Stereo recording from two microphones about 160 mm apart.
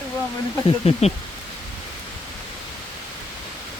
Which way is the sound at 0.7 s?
40° left (ahead or behind).